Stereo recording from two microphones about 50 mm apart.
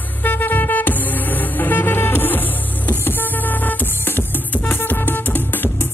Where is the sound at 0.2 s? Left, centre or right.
Left.